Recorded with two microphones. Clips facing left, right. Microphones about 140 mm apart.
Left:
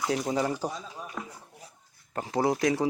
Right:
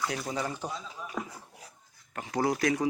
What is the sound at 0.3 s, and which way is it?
Speech, 35° left (ahead or behind).